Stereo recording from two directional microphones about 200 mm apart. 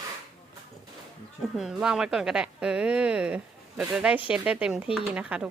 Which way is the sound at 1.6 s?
5° right (ahead or behind).